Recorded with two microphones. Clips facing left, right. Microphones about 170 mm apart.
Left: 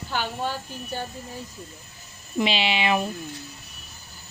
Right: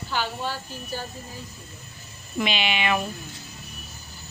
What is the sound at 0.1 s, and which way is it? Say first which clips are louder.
Speech: left 1 dB; 50° left (ahead or behind).